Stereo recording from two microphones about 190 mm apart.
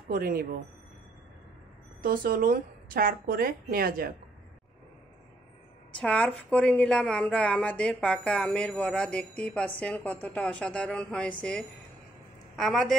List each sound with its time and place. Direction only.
0.1 s a woman's voice: 50° right (ahead or behind)
2.0 s a woman's voice: 50° right (ahead or behind)
5.9 s a woman's voice: 5° left (ahead or behind)